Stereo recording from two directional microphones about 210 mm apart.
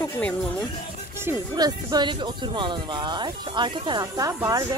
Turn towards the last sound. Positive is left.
turn(degrees=-15)  # may be behind; listen again after turning